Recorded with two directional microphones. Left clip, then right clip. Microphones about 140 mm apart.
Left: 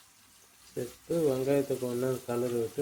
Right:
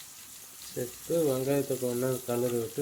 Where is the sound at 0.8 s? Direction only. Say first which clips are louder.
Right 1 dB; centre (ahead or behind).